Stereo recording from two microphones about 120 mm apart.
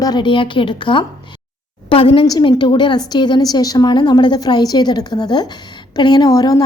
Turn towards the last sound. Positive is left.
turn(degrees=30)  # may be behind; listen again after turning